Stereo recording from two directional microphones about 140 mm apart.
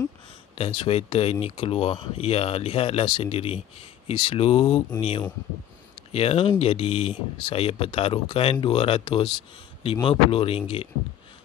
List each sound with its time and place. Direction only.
0.6 s speech: 40° left (ahead or behind)